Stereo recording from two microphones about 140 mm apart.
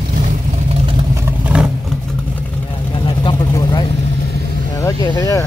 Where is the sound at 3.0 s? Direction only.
35° left (ahead or behind).